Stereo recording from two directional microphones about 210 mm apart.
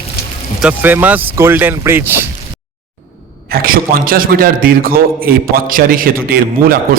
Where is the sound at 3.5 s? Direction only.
45° right (ahead or behind).